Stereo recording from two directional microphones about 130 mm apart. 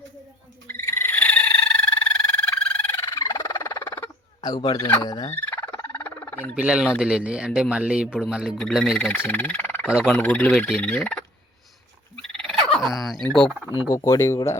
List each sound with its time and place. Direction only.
0.7 s frog: 15° left (ahead or behind)
4.4 s turkey: 30° left (ahead or behind)
5.3 s frog: 15° left (ahead or behind)
6.6 s speech: 5° right (ahead or behind); by 11.2 s 10° left (ahead or behind)
12.1 s frog: 5° left (ahead or behind)
13.8 s speech: 25° left (ahead or behind)